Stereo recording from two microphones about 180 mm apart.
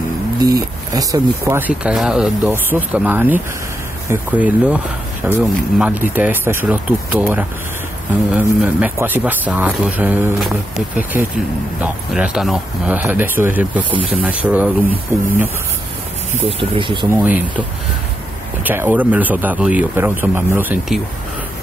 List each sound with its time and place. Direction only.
0.4 s speech: 20° right (ahead or behind)
1.4 s speech: 10° right (ahead or behind)
16.3 s speech: 30° right (ahead or behind)
17.1 s speech: 10° right (ahead or behind)